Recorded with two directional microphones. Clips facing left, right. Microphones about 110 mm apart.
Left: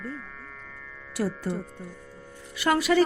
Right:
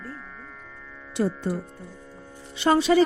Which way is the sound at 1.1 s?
25° right (ahead or behind).